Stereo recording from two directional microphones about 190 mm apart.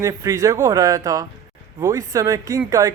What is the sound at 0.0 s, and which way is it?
Speech, 15° right (ahead or behind).